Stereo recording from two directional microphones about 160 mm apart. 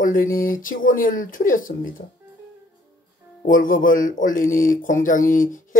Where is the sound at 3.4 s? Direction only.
60° left (ahead or behind).